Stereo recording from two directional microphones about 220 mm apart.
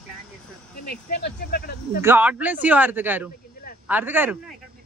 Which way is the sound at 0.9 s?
50° left (ahead or behind).